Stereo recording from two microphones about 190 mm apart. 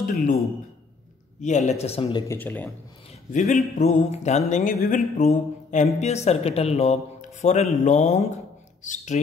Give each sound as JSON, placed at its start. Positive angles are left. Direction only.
{"t": 0.0, "sound": "speech", "side_deg": 45}
{"t": 1.4, "sound": "speech", "side_deg": 40}
{"t": 2.2, "sound": "speech", "side_deg": 10}
{"t": 3.3, "sound": "a man's voice", "side_deg": 40}